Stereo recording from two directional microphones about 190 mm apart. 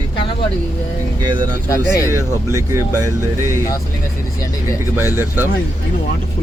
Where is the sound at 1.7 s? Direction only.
15° left (ahead or behind).